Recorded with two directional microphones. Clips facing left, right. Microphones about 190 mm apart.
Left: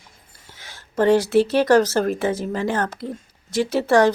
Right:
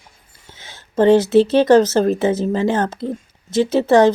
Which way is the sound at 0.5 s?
25° right (ahead or behind).